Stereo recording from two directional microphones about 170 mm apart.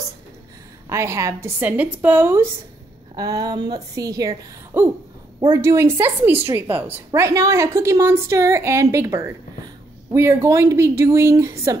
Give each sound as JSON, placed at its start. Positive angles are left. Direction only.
{"t": 0.8, "sound": "a woman's voice", "side_deg": -15}
{"t": 3.2, "sound": "a woman's voice", "side_deg": -20}
{"t": 4.7, "sound": "a woman's voice", "side_deg": -10}